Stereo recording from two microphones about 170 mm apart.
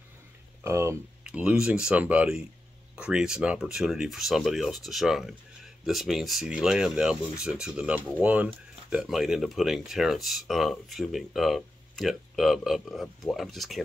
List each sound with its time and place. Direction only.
0.7 s speech: 15° right (ahead or behind); by 13.8 s centre (ahead or behind)